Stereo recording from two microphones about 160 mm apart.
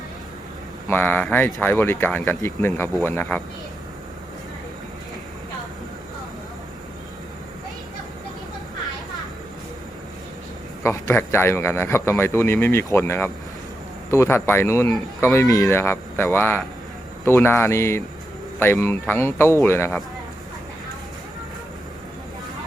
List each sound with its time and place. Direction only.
0.9 s a man's voice: 10° left (ahead or behind)
10.8 s a man's voice: 15° left (ahead or behind)